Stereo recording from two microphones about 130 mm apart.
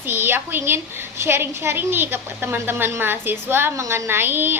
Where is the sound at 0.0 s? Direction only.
15° right (ahead or behind).